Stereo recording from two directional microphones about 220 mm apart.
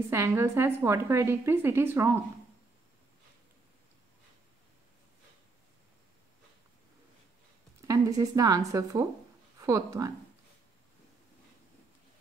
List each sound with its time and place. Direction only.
0.1 s a woman's voice: 10° right (ahead or behind)
7.8 s a woman's voice: 15° right (ahead or behind)